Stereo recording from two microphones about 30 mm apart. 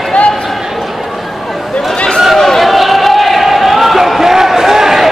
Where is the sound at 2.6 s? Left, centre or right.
Centre.